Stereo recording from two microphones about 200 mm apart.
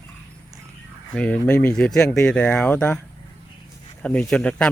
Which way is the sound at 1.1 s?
5° left (ahead or behind).